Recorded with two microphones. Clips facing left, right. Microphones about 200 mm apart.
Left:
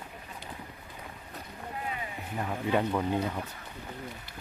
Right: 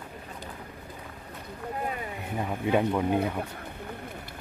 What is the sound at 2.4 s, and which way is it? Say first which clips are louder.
Speech: right 3 dB; 15° right (ahead or behind).